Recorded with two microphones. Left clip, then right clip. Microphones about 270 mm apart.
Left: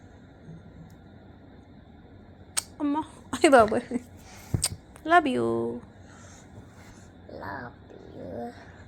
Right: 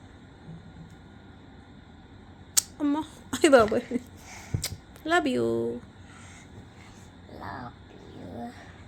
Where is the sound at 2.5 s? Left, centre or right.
Centre.